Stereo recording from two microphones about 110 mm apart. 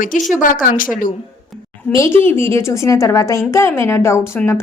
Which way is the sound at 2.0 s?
20° left (ahead or behind).